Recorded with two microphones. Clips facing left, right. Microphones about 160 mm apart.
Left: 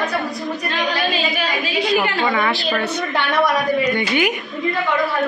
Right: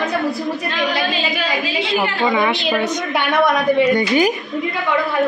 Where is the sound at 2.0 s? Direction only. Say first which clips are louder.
Right 2 dB; 15° right (ahead or behind).